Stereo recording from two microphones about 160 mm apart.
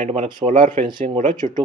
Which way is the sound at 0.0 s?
40° right (ahead or behind).